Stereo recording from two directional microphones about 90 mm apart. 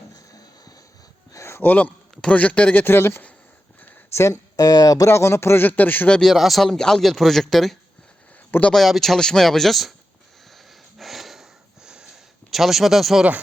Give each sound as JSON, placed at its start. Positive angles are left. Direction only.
{"t": 1.3, "sound": "a sound", "side_deg": 30}
{"t": 2.2, "sound": "a man's voice", "side_deg": 15}
{"t": 3.8, "sound": "a sound", "side_deg": 20}
{"t": 4.2, "sound": "speech", "side_deg": 40}
{"t": 5.0, "sound": "a man's voice", "side_deg": 30}
{"t": 6.1, "sound": "speech", "side_deg": 5}
{"t": 8.4, "sound": "speech", "side_deg": 20}
{"t": 8.7, "sound": "speech", "side_deg": 0}
{"t": 10.9, "sound": "a sound", "side_deg": 0}
{"t": 12.5, "sound": "speech", "side_deg": 0}